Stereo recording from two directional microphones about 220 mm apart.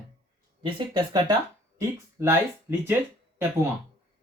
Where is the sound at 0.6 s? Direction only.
20° right (ahead or behind).